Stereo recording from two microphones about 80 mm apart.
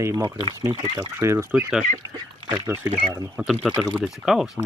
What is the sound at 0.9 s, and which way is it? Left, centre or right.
Speech, right.